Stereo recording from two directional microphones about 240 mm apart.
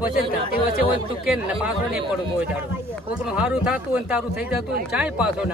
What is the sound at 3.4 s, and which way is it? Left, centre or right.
Speech, centre.